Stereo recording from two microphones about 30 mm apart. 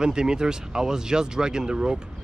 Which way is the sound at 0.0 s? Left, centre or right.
Right.